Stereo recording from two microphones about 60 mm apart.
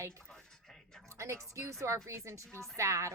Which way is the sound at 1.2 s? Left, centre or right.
Right.